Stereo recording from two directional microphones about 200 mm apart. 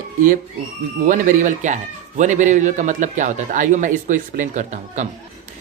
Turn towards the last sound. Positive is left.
turn(degrees=-40)  # may be behind; listen again after turning